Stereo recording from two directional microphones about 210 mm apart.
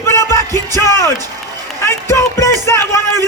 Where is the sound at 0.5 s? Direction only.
15° right (ahead or behind).